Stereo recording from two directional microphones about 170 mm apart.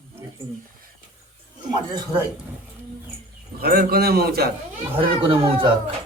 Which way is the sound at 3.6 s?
60° right (ahead or behind).